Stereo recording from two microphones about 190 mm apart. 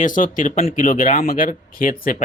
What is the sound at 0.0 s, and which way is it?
A man's voice, 45° left (ahead or behind).